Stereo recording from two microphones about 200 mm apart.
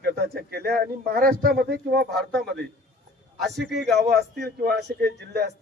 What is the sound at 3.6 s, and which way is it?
A man's voice, 55° right (ahead or behind).